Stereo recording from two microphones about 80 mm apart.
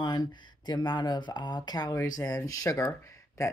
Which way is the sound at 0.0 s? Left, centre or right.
Left.